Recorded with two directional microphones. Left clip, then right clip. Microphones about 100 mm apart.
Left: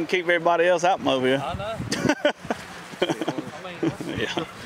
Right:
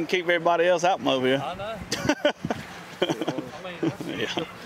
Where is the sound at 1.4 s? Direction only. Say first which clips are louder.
Left 2 dB; 20° left (ahead or behind).